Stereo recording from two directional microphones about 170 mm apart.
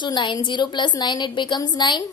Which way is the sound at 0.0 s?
25° left (ahead or behind).